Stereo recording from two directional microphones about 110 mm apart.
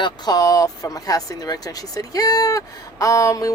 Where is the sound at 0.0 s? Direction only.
35° left (ahead or behind).